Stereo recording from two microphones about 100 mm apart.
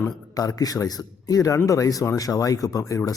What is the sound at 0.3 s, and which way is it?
A man's voice, 35° left (ahead or behind).